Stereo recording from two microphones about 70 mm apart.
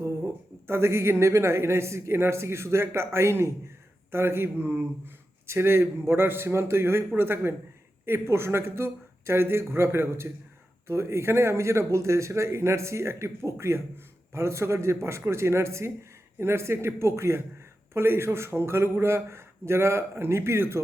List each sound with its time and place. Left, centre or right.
0.7 s speech: right